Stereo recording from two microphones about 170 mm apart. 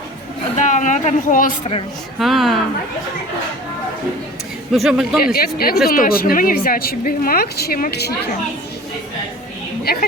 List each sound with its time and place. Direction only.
0.5 s a sound: 45° left (ahead or behind)
2.1 s a man's voice: centre (ahead or behind)
4.7 s a man's voice: centre (ahead or behind)
5.2 s a woman's voice: 65° left (ahead or behind)
9.8 s a woman's voice: 65° left (ahead or behind)